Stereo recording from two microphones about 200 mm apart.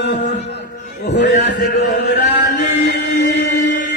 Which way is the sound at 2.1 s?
55° left (ahead or behind).